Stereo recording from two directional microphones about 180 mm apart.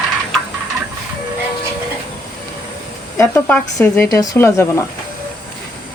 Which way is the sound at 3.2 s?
10° left (ahead or behind).